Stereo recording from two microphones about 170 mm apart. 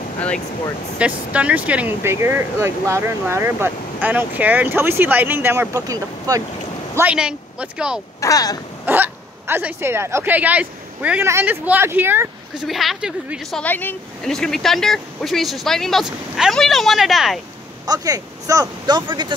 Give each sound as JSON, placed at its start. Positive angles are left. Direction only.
{"t": 0.9, "sound": "speech", "side_deg": -10}
{"t": 7.0, "sound": "speech", "side_deg": -5}
{"t": 8.2, "sound": "speech", "side_deg": 20}
{"t": 8.8, "sound": "speech", "side_deg": -10}
{"t": 12.6, "sound": "speech", "side_deg": 0}
{"t": 13.6, "sound": "speech", "side_deg": 10}
{"t": 17.8, "sound": "speech", "side_deg": -20}